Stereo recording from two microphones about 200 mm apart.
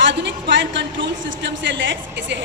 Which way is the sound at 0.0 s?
65° right (ahead or behind).